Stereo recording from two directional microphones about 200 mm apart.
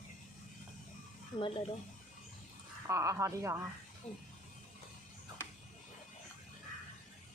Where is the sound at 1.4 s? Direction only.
25° left (ahead or behind).